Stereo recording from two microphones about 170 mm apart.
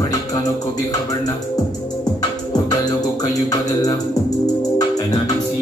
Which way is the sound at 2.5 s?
25° left (ahead or behind).